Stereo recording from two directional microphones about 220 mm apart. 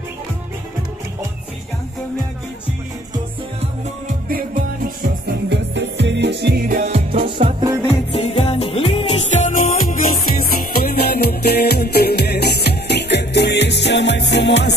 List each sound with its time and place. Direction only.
5.2 s music: 50° right (ahead or behind)
7.4 s music: 20° right (ahead or behind)
8.2 s music: 25° left (ahead or behind); by 14.8 s 50° left (ahead or behind)